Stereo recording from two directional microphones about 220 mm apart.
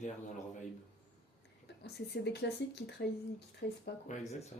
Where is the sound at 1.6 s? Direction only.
50° left (ahead or behind).